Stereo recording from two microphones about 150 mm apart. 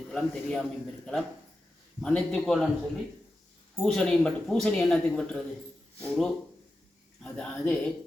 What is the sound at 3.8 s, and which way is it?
A man's voice, 5° left (ahead or behind).